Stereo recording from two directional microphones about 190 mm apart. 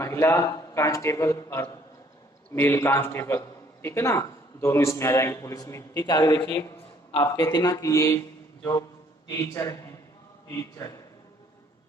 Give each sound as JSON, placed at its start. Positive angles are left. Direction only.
{"t": 0.0, "sound": "a man's voice", "side_deg": 15}
{"t": 9.3, "sound": "a man's voice", "side_deg": 15}